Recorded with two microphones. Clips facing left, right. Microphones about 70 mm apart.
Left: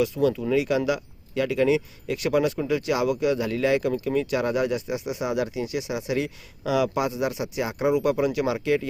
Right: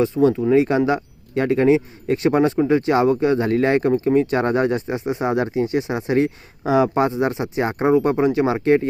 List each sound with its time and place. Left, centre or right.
0.0 s speech: right